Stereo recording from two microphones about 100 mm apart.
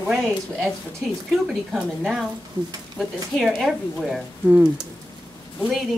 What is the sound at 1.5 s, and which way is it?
Speech, centre (ahead or behind).